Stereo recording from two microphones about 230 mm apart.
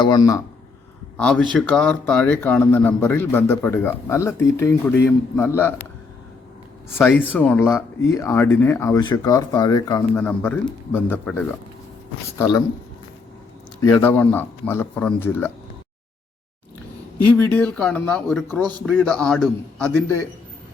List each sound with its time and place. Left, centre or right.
0.0 s speech: centre
1.1 s a man's voice: centre
7.0 s speech: centre
13.8 s speech: centre
17.3 s speech: centre